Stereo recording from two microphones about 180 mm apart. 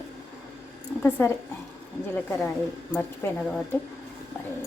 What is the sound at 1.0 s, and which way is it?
Speech, 10° left (ahead or behind).